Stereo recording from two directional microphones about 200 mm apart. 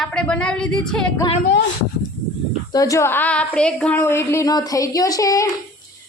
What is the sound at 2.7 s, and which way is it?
A woman's voice, 15° left (ahead or behind).